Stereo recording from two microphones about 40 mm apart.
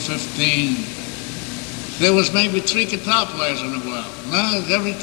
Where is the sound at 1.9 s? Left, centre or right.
Centre.